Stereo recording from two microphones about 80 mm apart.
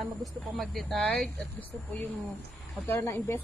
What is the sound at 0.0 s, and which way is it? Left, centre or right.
Speech, centre.